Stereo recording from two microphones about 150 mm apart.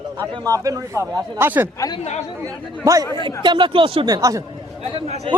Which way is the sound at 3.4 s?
35° right (ahead or behind).